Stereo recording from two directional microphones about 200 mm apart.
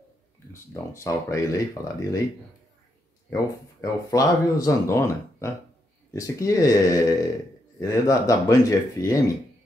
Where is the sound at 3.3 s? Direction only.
15° left (ahead or behind).